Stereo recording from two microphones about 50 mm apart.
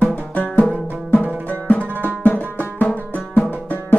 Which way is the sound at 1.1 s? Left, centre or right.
Left.